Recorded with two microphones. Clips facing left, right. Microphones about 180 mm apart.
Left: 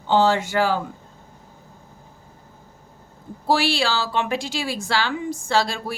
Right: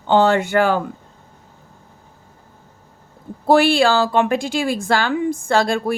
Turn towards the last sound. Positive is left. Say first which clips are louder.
# right 5 dB
turn(degrees=-55)  # may be behind; listen again after turning